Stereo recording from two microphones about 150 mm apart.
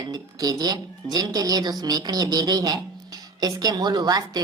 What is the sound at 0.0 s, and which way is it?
Speech, 25° right (ahead or behind).